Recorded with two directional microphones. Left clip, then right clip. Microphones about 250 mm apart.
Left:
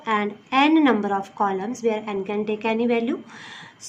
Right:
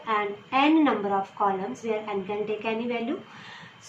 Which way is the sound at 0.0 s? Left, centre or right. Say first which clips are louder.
Left 3 dB; left.